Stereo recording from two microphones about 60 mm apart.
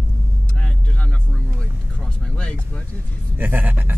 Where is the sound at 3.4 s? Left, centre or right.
Right.